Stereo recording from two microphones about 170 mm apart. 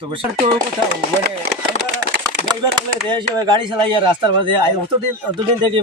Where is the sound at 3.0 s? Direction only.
25° right (ahead or behind).